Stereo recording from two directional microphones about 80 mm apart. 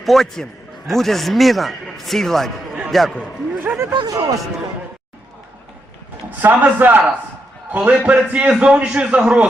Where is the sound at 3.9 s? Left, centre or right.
Right.